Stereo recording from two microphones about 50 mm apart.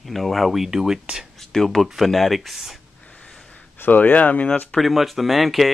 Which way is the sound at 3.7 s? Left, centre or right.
Left.